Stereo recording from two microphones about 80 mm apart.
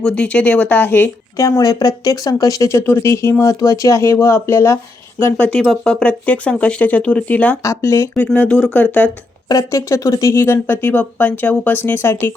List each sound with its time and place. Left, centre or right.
0.0 s speech: centre
1.4 s speech: left
5.4 s speech: centre
7.6 s speech: left
8.2 s speech: left
8.4 s speech: centre
8.7 s speech: left
9.7 s speech: left